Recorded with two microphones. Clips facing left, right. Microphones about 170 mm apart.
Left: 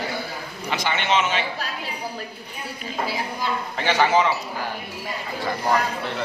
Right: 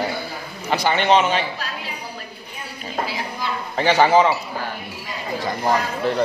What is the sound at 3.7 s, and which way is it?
Speech, 35° right (ahead or behind).